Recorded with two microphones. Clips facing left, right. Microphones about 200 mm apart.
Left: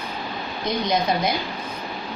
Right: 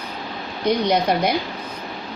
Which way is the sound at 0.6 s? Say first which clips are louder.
Right 4 dB; 65° right (ahead or behind).